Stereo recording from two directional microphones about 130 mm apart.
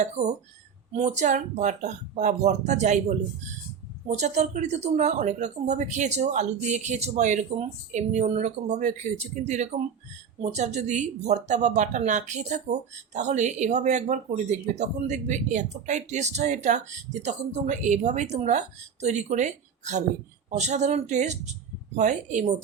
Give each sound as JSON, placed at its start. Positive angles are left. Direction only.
{"t": 0.0, "sound": "speech", "side_deg": -60}
{"t": 4.2, "sound": "speech", "side_deg": -60}